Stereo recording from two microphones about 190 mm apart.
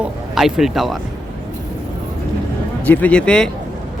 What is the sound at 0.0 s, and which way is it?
Speech, 5° right (ahead or behind).